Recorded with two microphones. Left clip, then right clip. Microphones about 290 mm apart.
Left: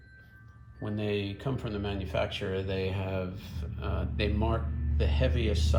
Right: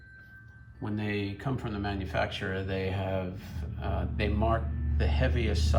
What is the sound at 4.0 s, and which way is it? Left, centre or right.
Speech, centre.